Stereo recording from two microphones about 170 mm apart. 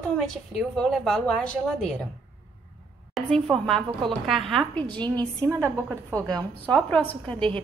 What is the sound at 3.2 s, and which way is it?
A woman's voice, centre (ahead or behind).